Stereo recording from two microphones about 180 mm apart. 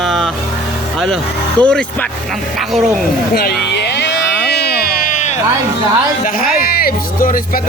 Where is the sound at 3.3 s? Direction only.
60° left (ahead or behind); by 5.3 s 45° left (ahead or behind).